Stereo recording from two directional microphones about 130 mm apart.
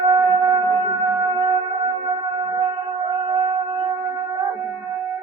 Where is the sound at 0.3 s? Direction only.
35° right (ahead or behind).